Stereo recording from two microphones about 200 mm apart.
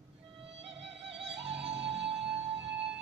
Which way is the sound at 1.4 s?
30° right (ahead or behind).